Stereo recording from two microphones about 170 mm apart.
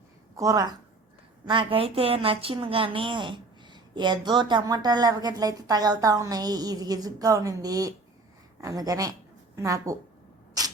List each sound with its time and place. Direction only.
0.3 s a woman's voice: 20° right (ahead or behind)